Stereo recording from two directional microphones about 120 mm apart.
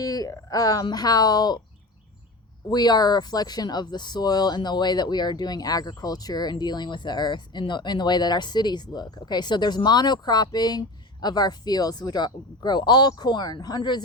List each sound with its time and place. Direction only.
0.0 s speech: 30° left (ahead or behind)
2.6 s speech: 35° left (ahead or behind)